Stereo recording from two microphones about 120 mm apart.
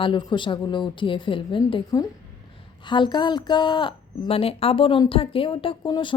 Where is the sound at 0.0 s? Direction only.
40° left (ahead or behind).